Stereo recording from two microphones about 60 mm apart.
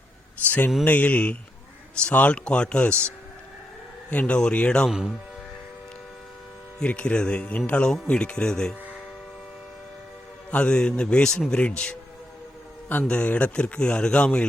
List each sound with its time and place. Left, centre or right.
0.4 s a sound: left
0.9 s speech: left
4.1 s speech: left
4.9 s speech: centre
6.7 s speech: centre
10.5 s speech: centre
13.1 s speech: centre